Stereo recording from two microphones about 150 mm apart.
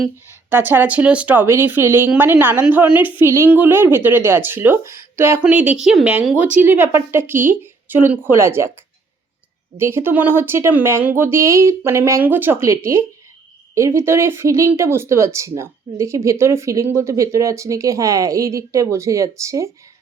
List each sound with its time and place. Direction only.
0.5 s speech: 15° right (ahead or behind)
9.7 s speech: 15° right (ahead or behind)